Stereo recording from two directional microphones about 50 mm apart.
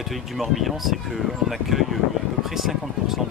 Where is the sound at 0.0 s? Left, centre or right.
Centre.